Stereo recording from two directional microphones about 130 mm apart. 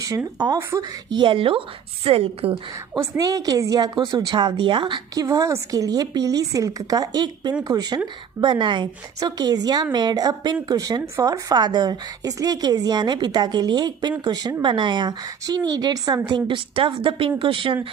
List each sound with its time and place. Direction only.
0.3 s a woman's voice: 30° right (ahead or behind)
3.0 s a woman's voice: 25° right (ahead or behind)